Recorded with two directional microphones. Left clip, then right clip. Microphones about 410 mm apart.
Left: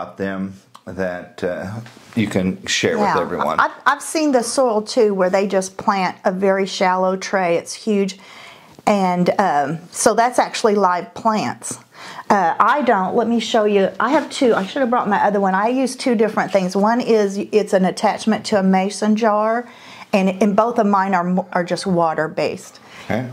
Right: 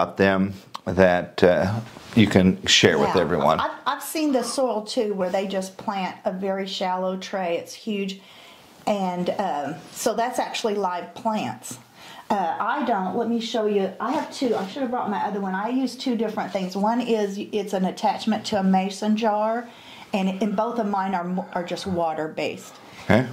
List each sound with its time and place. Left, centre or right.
0.2 s speech: right
2.1 s speech: right
3.5 s a woman's voice: left
13.2 s a woman's voice: left
13.5 s speech: left
15.0 s a woman's voice: left
23.1 s speech: right